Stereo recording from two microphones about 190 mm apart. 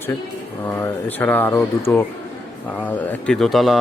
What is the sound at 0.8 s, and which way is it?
A man's voice, 10° left (ahead or behind).